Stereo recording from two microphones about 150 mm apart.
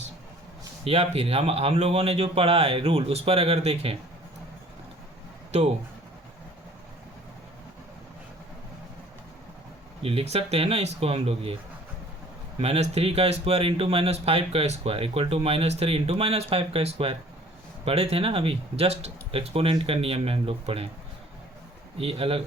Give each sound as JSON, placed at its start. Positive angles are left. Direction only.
{"t": 0.9, "sound": "speech", "side_deg": -45}
{"t": 5.5, "sound": "speech", "side_deg": -45}
{"t": 10.0, "sound": "speech", "side_deg": -40}
{"t": 12.5, "sound": "speech", "side_deg": -45}
{"t": 21.9, "sound": "speech", "side_deg": -40}